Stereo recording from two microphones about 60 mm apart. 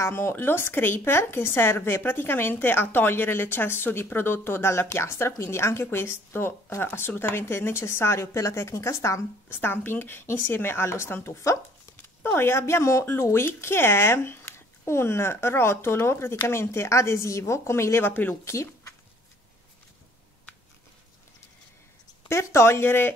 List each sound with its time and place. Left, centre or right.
0.1 s speech: left
9.5 s speech: left
22.3 s speech: left